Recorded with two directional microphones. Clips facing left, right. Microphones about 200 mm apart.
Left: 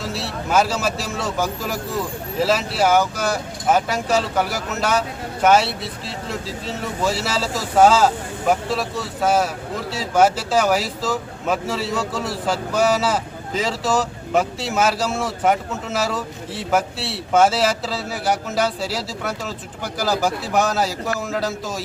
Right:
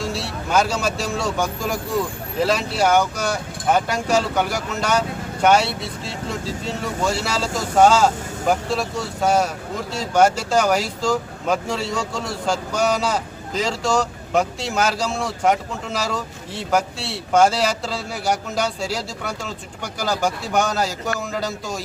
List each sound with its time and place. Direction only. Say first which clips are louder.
0.0 s speech: right 1 dB; centre (ahead or behind)